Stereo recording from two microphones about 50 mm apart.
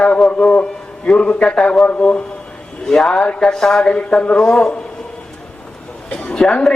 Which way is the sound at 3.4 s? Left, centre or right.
Centre.